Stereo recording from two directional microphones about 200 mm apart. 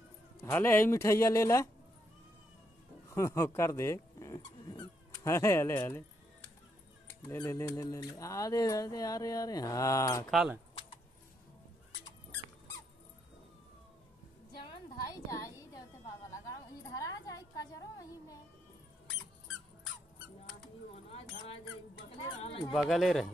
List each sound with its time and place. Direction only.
0.4 s speech: 10° left (ahead or behind)
3.1 s speech: 15° left (ahead or behind)
7.2 s speech: 15° left (ahead or behind)
10.3 s speech: 5° right (ahead or behind)
14.6 s a sound: 20° left (ahead or behind)
22.1 s a sound: 30° left (ahead or behind)
22.7 s speech: centre (ahead or behind)